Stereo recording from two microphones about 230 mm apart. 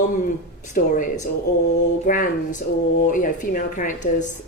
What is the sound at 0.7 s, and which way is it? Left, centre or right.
A woman's voice, left.